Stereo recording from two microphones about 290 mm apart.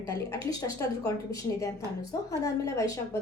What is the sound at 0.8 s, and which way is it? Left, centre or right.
Speech, centre.